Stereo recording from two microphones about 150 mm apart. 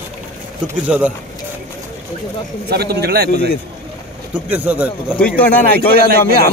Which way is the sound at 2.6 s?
90° right.